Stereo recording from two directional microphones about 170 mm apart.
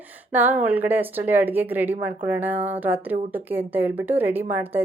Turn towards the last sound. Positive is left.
turn(degrees=-10)  # may be behind; listen again after turning